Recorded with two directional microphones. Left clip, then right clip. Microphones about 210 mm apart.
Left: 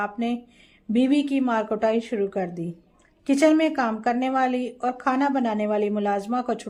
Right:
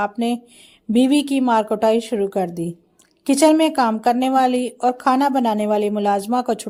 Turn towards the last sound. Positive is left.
turn(degrees=-35)  # may be behind; listen again after turning